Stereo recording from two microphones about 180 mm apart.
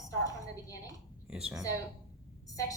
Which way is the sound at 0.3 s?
20° left (ahead or behind).